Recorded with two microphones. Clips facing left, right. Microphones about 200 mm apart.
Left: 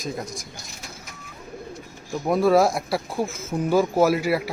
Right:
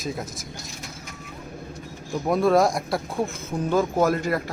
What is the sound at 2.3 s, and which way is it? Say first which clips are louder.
Speech: left 1 dB; centre (ahead or behind).